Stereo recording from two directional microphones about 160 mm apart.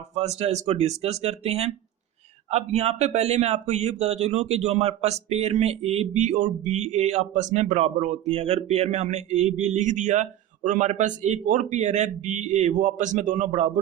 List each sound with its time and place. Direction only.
0.1 s speech: 40° right (ahead or behind)